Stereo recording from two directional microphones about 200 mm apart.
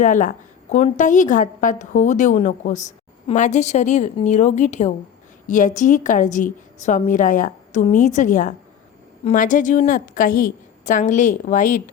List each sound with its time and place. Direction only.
0.0 s a woman's voice: 40° left (ahead or behind)